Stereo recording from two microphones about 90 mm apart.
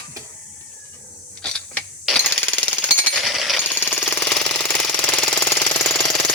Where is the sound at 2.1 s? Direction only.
10° left (ahead or behind).